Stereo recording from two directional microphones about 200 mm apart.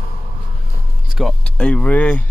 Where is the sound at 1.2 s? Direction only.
Centre (ahead or behind).